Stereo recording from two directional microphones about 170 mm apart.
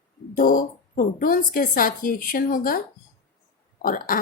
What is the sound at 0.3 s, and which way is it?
A woman's voice, 55° left (ahead or behind).